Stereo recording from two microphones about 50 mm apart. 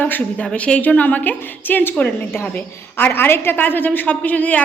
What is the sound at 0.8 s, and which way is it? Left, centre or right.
A woman's voice, left.